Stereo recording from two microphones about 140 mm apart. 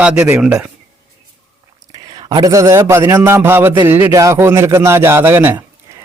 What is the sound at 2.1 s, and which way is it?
A man's voice, 35° right (ahead or behind).